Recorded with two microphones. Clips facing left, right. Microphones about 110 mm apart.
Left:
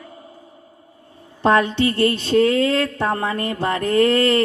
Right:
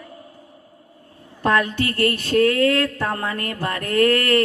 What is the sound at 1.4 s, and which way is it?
A man's voice, 25° left (ahead or behind).